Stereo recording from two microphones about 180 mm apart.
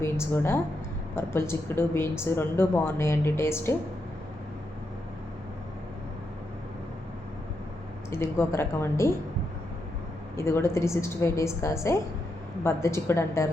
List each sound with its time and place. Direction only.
0.0 s a woman's voice: 15° left (ahead or behind)
8.1 s a woman's voice: 15° left (ahead or behind)
10.3 s a woman's voice: 15° left (ahead or behind)